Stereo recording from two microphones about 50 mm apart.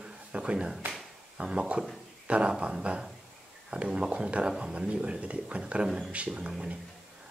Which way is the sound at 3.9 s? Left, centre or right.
Centre.